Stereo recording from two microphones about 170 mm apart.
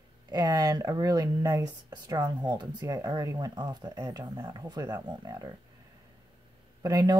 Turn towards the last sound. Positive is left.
turn(degrees=-25)  # may be behind; listen again after turning